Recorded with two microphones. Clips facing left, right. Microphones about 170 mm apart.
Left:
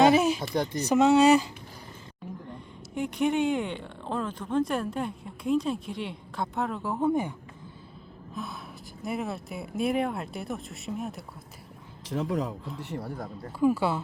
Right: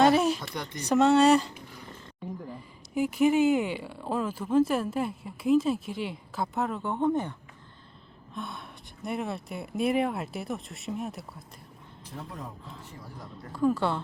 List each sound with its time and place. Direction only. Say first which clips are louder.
0.0 s a sound: left 1 dB; centre (ahead or behind)
0.5 s speech: left 8 dB; 35° left (ahead or behind)
0.8 s speech: even; centre (ahead or behind)
8.4 s speech: left 1 dB; centre (ahead or behind)
12.0 s a man's voice: left 12 dB; 90° left
12.8 s speech: left 9 dB; 70° left (ahead or behind)
13.5 s a woman's voice: left 1 dB; 10° left (ahead or behind)